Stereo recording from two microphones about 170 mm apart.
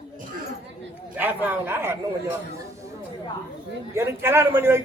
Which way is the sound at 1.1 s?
10° right (ahead or behind).